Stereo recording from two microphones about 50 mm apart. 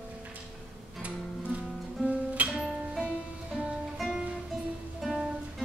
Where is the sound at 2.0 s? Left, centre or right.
Right.